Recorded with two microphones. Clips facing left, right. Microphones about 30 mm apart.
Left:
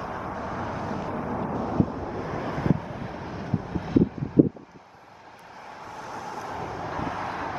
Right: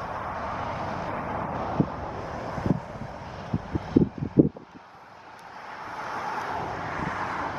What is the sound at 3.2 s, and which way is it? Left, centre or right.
Vehicle, centre.